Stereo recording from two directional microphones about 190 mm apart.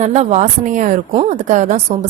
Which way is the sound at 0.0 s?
35° right (ahead or behind).